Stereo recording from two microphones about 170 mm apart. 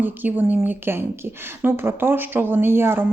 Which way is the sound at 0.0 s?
10° right (ahead or behind).